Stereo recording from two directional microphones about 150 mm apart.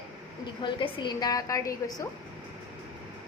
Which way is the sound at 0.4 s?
35° left (ahead or behind).